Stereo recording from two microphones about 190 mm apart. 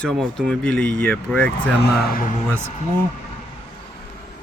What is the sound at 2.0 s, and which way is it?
Speech, 50° left (ahead or behind).